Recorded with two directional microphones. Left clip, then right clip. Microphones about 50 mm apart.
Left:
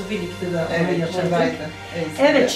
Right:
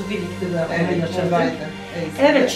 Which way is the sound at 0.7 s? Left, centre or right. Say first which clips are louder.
Even; centre.